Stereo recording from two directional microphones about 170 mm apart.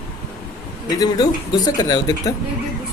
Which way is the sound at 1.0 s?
20° left (ahead or behind).